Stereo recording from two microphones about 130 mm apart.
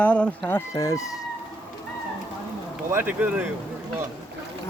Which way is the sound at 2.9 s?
15° right (ahead or behind).